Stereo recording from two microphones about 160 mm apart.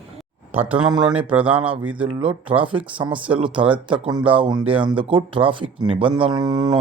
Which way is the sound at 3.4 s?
30° right (ahead or behind).